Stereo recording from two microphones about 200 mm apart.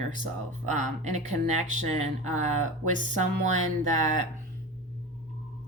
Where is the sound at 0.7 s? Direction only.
35° right (ahead or behind).